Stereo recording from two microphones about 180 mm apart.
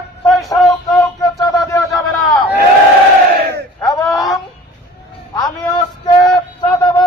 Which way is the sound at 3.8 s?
20° left (ahead or behind).